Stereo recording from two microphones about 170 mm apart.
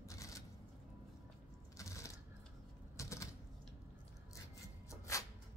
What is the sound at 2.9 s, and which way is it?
Typewriter, 20° left (ahead or behind).